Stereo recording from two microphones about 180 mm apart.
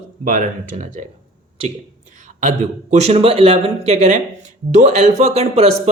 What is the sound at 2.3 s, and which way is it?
Speech, 40° right (ahead or behind).